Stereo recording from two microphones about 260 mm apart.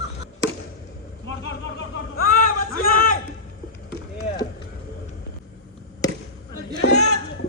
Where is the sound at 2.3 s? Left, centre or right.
Left.